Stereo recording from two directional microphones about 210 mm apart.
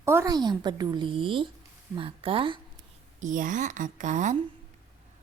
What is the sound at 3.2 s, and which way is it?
A woman's voice, 40° right (ahead or behind).